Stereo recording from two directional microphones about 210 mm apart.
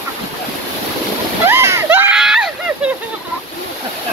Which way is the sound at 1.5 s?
10° right (ahead or behind).